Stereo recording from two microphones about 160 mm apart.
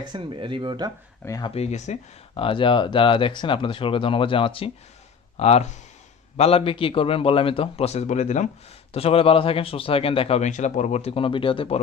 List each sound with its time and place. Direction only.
0.0 s speech: 30° right (ahead or behind)
1.2 s speech: 20° left (ahead or behind)
1.5 s speech: 45° left (ahead or behind)